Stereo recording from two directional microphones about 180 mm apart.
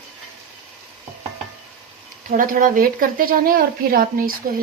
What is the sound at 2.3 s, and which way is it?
A woman's voice, 50° right (ahead or behind).